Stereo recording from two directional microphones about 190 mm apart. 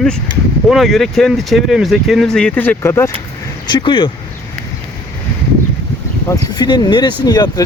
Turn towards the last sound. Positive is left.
turn(degrees=20)  # may be behind; listen again after turning